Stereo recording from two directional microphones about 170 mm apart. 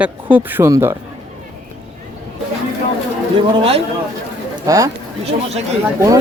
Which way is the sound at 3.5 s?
35° right (ahead or behind).